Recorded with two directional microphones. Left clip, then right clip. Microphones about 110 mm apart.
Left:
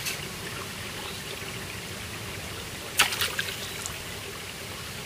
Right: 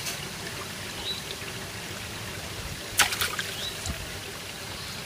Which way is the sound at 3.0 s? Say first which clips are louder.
Even; 20° right (ahead or behind).